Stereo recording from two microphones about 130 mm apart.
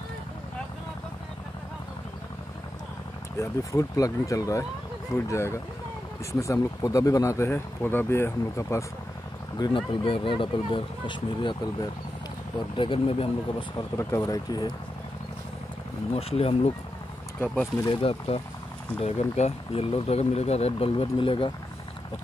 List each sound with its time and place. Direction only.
3.3 s speech: 25° left (ahead or behind)
9.6 s speech: 40° left (ahead or behind)
13.9 s speech: 25° left (ahead or behind)
16.2 s speech: 50° left (ahead or behind)
17.8 s speech: 50° left (ahead or behind)